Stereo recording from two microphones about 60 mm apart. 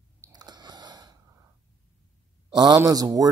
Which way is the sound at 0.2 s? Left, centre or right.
Right.